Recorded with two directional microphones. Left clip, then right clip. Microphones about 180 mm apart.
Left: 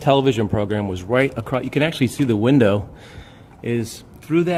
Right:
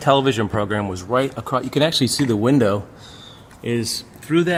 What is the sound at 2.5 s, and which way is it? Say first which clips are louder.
Speech: left 3 dB; 15° left (ahead or behind).